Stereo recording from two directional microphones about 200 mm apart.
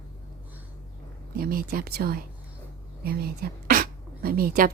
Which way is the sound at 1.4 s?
45° right (ahead or behind).